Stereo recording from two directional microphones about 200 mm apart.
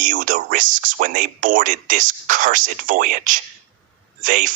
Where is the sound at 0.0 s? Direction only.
40° right (ahead or behind).